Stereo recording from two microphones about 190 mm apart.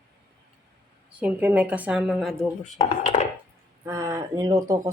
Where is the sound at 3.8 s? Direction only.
15° right (ahead or behind).